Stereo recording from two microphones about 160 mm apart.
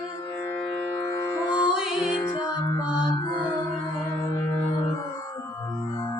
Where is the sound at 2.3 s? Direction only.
30° left (ahead or behind).